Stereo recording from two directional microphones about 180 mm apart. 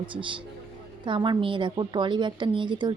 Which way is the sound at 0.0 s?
30° right (ahead or behind).